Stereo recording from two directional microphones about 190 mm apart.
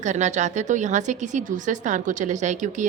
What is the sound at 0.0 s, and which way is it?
Speech, 40° right (ahead or behind).